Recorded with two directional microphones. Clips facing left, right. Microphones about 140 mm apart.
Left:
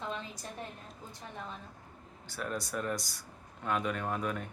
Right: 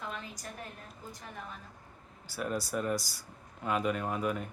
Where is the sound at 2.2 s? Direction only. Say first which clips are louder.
Right 3 dB; 5° right (ahead or behind).